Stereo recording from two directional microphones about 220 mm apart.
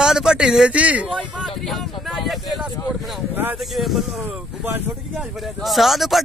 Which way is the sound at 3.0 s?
5° right (ahead or behind).